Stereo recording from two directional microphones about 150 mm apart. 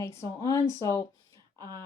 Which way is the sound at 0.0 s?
20° left (ahead or behind).